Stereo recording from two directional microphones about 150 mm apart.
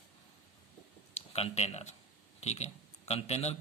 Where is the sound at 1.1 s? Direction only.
45° left (ahead or behind).